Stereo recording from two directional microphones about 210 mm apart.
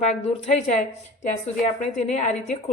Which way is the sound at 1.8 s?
30° left (ahead or behind).